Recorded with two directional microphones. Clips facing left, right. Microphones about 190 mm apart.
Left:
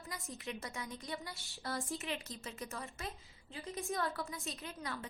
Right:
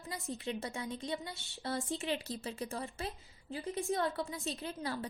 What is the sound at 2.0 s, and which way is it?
A woman's voice, 35° right (ahead or behind).